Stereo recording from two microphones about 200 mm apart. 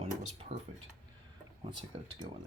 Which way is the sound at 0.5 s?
30° right (ahead or behind).